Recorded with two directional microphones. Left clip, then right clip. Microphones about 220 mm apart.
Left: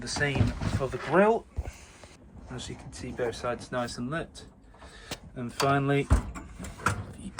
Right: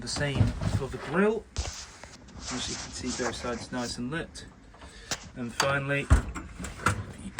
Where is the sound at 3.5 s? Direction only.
5° left (ahead or behind).